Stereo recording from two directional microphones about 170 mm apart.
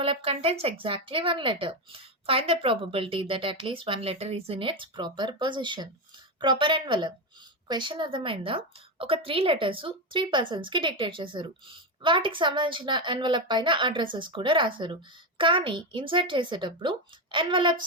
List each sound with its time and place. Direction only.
0.0 s a woman's voice: 35° right (ahead or behind)